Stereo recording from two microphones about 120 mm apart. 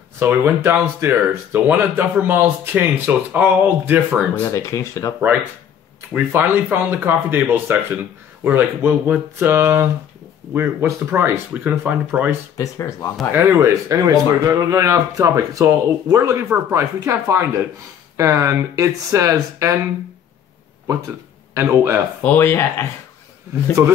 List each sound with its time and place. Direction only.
0.2 s speech: 15° right (ahead or behind)
4.4 s speech: 25° left (ahead or behind)
6.1 s speech: 15° right (ahead or behind)
12.5 s speech: 30° left (ahead or behind)
13.3 s speech: 20° right (ahead or behind)
21.5 s speech: 20° right (ahead or behind)
22.2 s speech: 20° left (ahead or behind)
23.8 s speech: 20° right (ahead or behind)